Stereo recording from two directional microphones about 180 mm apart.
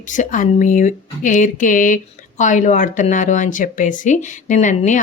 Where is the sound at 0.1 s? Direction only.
45° left (ahead or behind).